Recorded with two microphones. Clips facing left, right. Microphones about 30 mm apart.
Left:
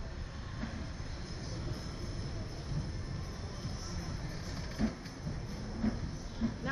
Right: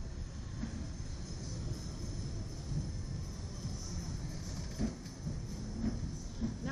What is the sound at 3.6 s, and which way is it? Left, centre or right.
Music, left.